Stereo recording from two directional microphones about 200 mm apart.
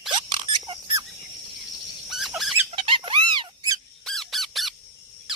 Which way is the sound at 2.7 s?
25° right (ahead or behind).